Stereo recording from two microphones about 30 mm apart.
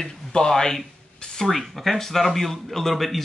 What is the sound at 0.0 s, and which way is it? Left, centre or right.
Speech, centre.